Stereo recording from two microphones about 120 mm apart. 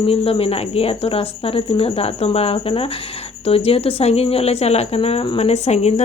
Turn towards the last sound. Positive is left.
turn(degrees=65)  # may be behind; listen again after turning